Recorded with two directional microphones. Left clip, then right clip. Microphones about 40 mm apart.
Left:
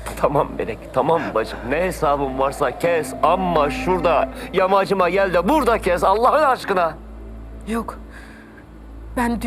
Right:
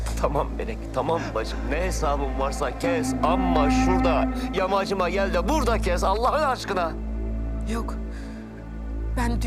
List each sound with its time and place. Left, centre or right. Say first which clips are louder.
0.0 s speech: left 7 dB; right
9.1 s speech: left 7 dB; right